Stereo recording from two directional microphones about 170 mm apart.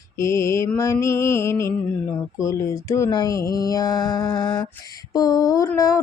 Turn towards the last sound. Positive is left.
turn(degrees=20)  # may be behind; listen again after turning